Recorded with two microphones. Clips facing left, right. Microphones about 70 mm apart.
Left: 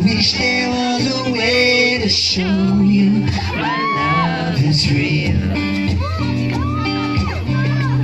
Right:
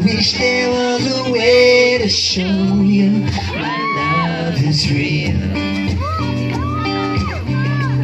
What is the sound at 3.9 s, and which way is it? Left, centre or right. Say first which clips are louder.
Music: even; centre.